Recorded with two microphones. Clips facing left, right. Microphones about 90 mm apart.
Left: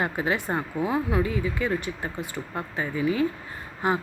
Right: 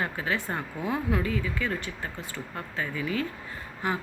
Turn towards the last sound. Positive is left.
turn(degrees=25)  # may be behind; listen again after turning